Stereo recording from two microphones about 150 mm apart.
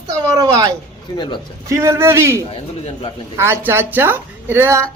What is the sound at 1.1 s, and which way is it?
Speech, 30° left (ahead or behind).